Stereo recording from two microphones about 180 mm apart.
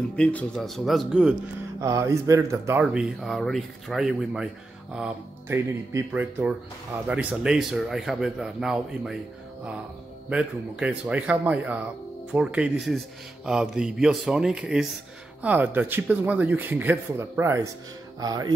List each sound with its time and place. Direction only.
0.1 s speech: 5° left (ahead or behind)
1.8 s speech: 15° right (ahead or behind)
2.8 s speech: 5° right (ahead or behind)
10.3 s speech: 5° right (ahead or behind)